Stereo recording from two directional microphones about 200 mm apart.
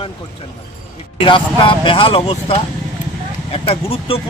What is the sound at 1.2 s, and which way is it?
Speech, 25° left (ahead or behind).